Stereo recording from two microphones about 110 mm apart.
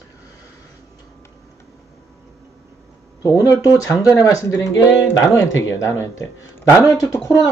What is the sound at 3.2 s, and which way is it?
Speech, 30° left (ahead or behind).